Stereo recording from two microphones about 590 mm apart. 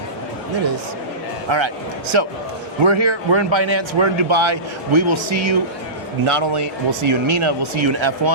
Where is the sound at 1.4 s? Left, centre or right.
Right.